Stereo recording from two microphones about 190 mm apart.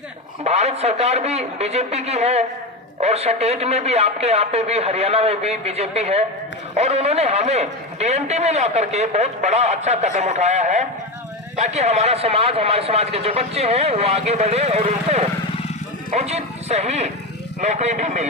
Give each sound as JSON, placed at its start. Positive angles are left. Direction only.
{"t": 0.4, "sound": "a man's voice", "side_deg": -35}